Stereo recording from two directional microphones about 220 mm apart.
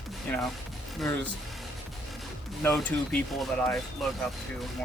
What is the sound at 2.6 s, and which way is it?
Speech, 5° left (ahead or behind).